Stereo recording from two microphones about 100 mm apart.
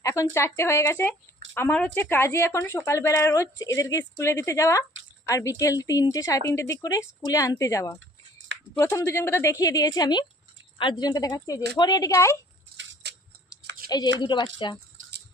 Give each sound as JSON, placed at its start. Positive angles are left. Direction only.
{"t": 0.0, "sound": "a woman's voice", "side_deg": 30}
{"t": 11.3, "sound": "a woman's voice", "side_deg": 35}
{"t": 13.9, "sound": "a woman's voice", "side_deg": 45}